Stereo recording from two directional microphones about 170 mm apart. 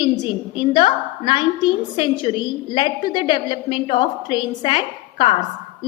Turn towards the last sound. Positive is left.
turn(degrees=30)  # may be behind; listen again after turning